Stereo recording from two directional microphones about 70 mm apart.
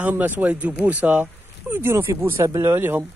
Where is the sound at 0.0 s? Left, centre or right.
Right.